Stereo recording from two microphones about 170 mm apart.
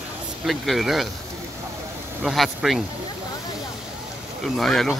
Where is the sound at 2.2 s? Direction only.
Centre (ahead or behind).